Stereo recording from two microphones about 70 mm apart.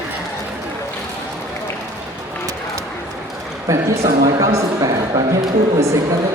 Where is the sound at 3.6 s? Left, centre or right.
Right.